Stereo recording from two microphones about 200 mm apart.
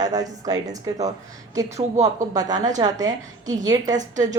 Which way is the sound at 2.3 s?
20° right (ahead or behind).